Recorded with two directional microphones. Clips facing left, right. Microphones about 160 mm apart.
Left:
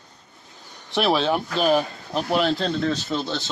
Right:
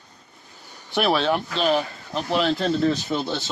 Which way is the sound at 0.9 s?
Centre (ahead or behind).